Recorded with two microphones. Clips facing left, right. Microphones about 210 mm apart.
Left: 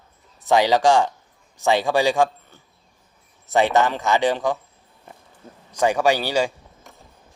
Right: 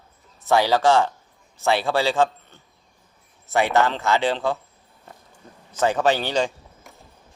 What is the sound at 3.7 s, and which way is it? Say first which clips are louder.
Speech: left 1 dB; 15° left (ahead or behind).